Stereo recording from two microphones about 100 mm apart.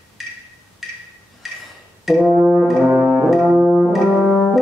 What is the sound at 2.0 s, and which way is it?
Brass instrument, centre (ahead or behind).